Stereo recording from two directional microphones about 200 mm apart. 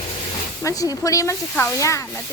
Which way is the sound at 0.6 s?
15° left (ahead or behind).